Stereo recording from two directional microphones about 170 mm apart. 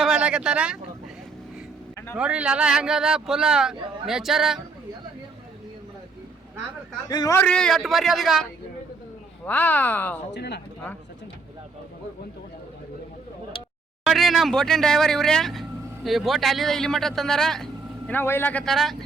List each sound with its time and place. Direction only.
0.0 s vehicle: 5° right (ahead or behind)
2.1 s a man's voice: 5° right (ahead or behind)
7.1 s a man's voice: 25° left (ahead or behind)
7.3 s a man's voice: 5° left (ahead or behind)
9.5 s speech: 10° left (ahead or behind)
10.3 s speech: 80° left
14.0 s a man's voice: centre (ahead or behind)